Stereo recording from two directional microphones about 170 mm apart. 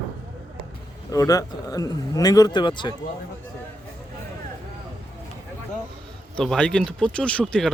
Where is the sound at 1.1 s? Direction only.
20° left (ahead or behind).